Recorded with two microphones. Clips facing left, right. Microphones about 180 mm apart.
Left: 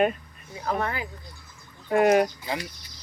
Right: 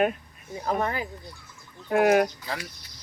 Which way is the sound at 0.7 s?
15° right (ahead or behind).